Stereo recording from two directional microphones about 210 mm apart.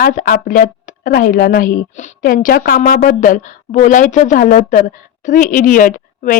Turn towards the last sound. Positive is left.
turn(degrees=40)  # may be behind; listen again after turning